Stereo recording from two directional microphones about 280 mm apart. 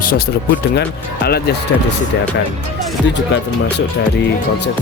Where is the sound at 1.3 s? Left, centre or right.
Left.